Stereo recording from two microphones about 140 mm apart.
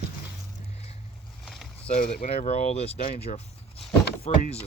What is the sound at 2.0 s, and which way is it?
Speech, 50° left (ahead or behind).